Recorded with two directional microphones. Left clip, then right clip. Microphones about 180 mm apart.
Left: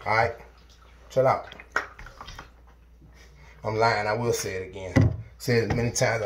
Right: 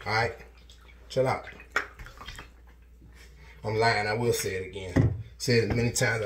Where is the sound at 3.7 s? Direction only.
50° right (ahead or behind).